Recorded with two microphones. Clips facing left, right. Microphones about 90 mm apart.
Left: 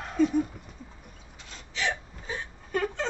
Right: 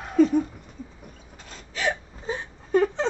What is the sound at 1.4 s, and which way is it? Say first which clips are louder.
Gasp: right 4 dB; 45° right (ahead or behind).